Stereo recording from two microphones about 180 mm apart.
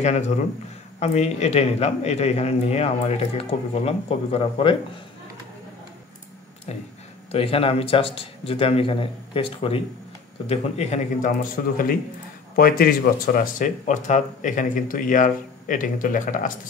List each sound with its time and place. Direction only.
0.0 s a man's voice: 40° left (ahead or behind)
7.3 s a man's voice: 30° left (ahead or behind); by 16.5 s 50° left (ahead or behind)